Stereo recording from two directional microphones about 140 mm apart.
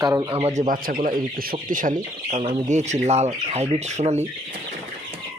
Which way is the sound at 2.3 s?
50° right (ahead or behind).